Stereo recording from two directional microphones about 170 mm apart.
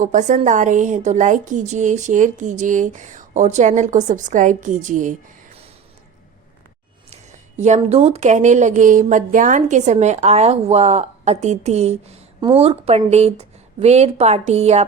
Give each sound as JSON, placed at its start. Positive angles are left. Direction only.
{"t": 0.0, "sound": "a woman's voice", "side_deg": -45}
{"t": 7.1, "sound": "a woman's voice", "side_deg": -40}